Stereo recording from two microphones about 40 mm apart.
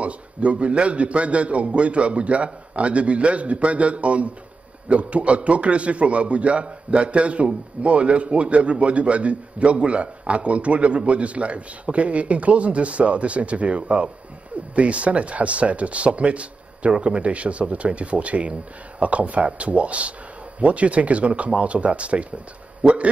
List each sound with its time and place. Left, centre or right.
0.0 s a man's voice: right